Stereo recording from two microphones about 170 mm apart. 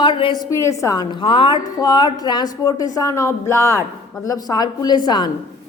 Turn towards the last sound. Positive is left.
turn(degrees=25)  # may be behind; listen again after turning